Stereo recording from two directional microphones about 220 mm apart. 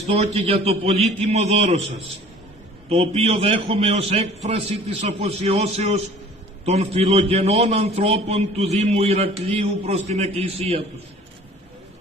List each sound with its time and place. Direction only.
0.0 s a man's voice: 30° right (ahead or behind)